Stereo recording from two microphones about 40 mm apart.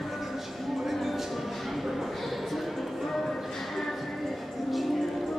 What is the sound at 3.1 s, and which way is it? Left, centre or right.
Music, centre.